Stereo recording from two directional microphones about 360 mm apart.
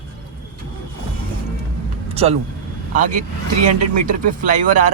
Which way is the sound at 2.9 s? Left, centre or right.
Right.